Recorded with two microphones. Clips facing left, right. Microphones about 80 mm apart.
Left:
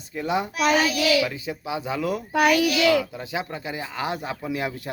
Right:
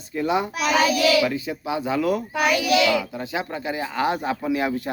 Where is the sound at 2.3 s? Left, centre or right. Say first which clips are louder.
Left 7 dB; left.